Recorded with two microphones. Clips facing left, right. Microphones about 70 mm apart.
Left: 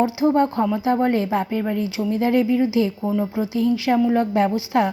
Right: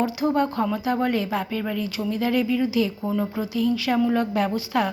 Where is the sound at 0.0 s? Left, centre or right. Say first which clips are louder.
Left 4 dB; left.